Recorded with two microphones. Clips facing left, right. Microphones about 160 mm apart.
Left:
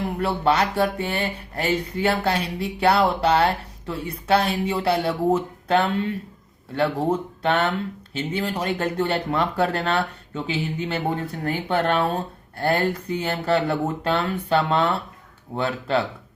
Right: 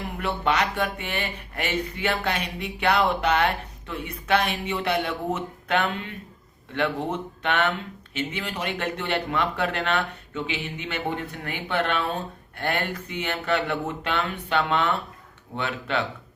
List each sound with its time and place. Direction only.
0.2 s speech: 35° left (ahead or behind)